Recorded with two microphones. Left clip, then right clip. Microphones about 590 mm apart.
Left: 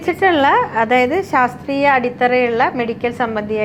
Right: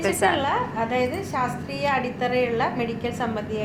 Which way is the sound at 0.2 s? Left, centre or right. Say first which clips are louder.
Left 12 dB; left.